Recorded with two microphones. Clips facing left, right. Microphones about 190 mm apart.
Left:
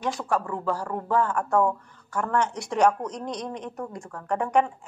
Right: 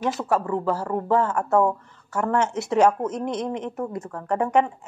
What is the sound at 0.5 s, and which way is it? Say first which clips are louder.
A woman's voice: right 4 dB; 20° right (ahead or behind).